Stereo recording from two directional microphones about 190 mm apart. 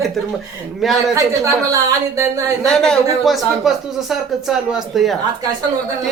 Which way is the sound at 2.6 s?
5° left (ahead or behind).